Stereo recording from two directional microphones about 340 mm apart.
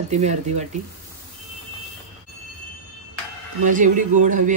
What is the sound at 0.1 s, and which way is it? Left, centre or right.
Speech, centre.